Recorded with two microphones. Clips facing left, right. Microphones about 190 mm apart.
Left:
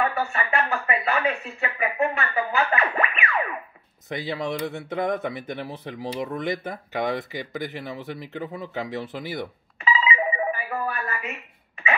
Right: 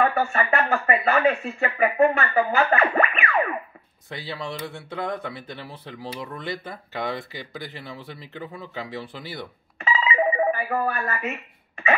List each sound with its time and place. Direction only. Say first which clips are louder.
0.0 s speech: right 3 dB; 45° right (ahead or behind)
4.1 s speech: left 5 dB; 20° left (ahead or behind)
9.8 s telephone: right 1 dB; 45° right (ahead or behind)